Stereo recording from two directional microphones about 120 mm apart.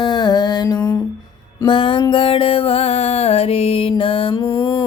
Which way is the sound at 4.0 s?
50° left (ahead or behind).